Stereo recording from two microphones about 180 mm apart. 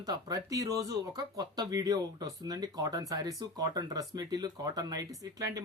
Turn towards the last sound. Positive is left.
turn(degrees=-20)  # may be behind; listen again after turning